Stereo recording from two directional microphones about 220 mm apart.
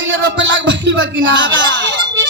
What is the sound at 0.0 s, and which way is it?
Music, 60° right (ahead or behind).